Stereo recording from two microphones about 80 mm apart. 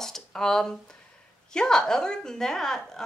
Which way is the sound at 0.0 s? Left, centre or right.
Centre.